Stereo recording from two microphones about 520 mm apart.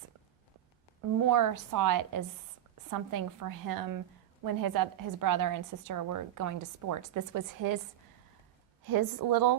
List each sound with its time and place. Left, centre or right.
1.2 s a woman's voice: right
8.9 s a woman's voice: right